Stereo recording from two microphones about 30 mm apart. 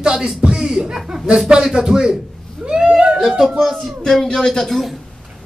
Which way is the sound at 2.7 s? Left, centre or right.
Right.